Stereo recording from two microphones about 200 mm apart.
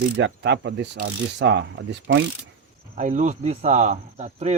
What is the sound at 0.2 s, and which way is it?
Mechanisms, 60° right (ahead or behind).